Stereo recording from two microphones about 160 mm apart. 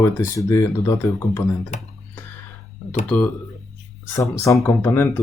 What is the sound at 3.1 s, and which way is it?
Speech, 10° left (ahead or behind).